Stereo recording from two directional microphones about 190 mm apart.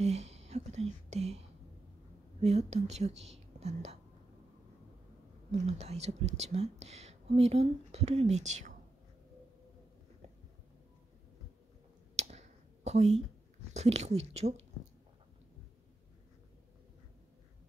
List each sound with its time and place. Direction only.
0.0 s whispering: 35° right (ahead or behind)
2.4 s speech: 35° right (ahead or behind)
5.5 s speech: 35° right (ahead or behind)
12.2 s a sound: 35° right (ahead or behind)
13.7 s speech: 35° right (ahead or behind)